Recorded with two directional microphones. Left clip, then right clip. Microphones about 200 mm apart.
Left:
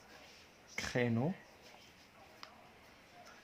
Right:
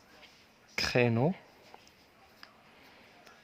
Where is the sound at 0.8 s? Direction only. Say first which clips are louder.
Right 8 dB; 45° right (ahead or behind).